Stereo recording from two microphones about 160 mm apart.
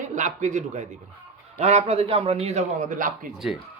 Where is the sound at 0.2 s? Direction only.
50° right (ahead or behind).